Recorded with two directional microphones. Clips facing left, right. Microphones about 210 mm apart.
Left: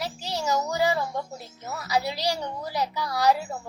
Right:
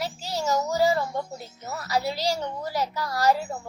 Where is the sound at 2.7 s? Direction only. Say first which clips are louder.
Left 1 dB; centre (ahead or behind).